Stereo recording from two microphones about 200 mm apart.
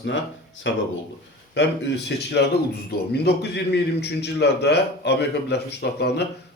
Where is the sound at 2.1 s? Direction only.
60° left (ahead or behind).